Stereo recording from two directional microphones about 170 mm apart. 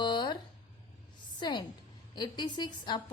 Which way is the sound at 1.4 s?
25° left (ahead or behind).